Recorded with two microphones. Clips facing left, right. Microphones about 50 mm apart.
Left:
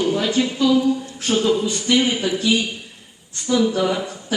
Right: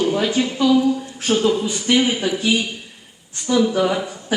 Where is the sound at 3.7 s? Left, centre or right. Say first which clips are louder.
Right 2 dB; centre.